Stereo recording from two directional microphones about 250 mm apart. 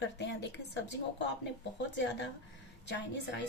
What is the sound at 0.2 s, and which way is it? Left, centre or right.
A woman's voice, left.